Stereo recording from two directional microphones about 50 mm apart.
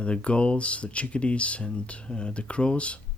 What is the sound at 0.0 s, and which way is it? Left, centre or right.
Speech, left.